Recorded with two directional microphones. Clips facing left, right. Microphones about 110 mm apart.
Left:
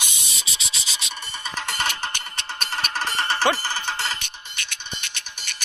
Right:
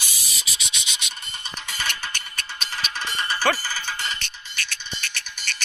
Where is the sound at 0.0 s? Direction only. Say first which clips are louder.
Left 2 dB; 25° left (ahead or behind).